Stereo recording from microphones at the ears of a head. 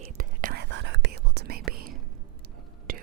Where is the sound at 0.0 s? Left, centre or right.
Right.